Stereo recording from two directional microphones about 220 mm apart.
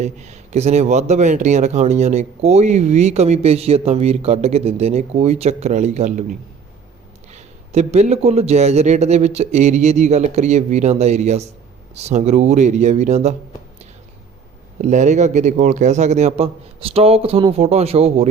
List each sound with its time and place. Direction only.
0.0 s speech: 30° right (ahead or behind)
7.3 s a man's voice: 30° right (ahead or behind)
14.8 s a man's voice: 35° right (ahead or behind)